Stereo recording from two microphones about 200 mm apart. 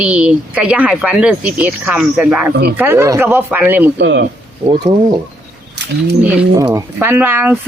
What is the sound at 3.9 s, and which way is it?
Speech, 60° right (ahead or behind).